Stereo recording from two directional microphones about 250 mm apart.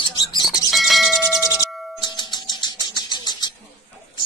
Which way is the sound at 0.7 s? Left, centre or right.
Centre.